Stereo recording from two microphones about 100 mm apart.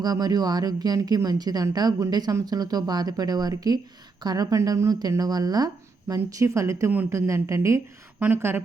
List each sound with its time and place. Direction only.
0.0 s speech: 40° right (ahead or behind)
6.1 s speech: 30° right (ahead or behind)